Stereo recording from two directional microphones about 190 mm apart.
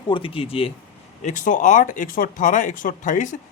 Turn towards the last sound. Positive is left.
turn(degrees=40)  # may be behind; listen again after turning